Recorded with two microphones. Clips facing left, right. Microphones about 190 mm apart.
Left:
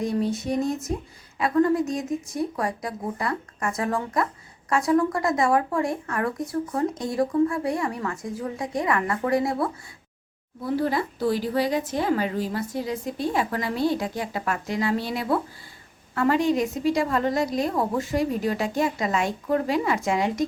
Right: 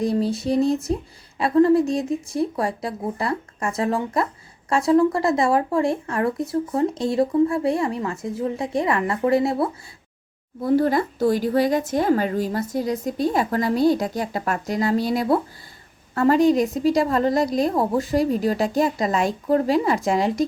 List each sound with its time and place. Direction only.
0.0 s speech: 35° right (ahead or behind)
10.6 s speech: 45° right (ahead or behind)